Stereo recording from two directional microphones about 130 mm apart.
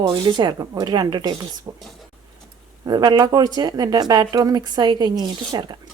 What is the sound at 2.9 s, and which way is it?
Speech, 30° right (ahead or behind).